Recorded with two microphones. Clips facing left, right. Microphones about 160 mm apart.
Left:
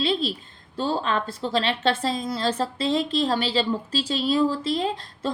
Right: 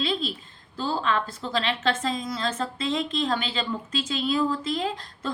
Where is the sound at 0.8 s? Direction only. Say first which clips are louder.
Left 1 dB; 35° left (ahead or behind).